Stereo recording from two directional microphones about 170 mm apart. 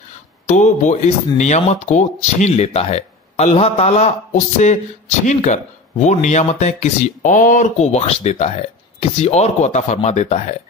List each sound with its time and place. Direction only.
0.5 s speech: 45° left (ahead or behind)